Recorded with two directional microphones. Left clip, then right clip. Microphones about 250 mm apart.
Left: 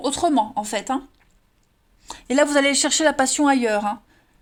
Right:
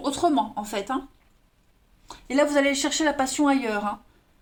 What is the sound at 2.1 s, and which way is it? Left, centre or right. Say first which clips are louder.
Speech: left 4 dB; left.